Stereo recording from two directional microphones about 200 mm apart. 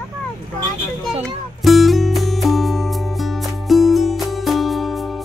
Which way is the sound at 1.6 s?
Centre (ahead or behind).